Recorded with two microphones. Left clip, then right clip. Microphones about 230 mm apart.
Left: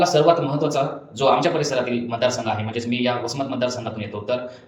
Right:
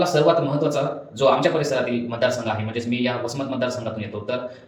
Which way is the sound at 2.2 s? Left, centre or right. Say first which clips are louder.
Even; left.